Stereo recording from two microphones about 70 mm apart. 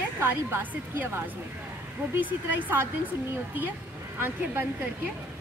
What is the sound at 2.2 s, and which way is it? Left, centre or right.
Speech, right.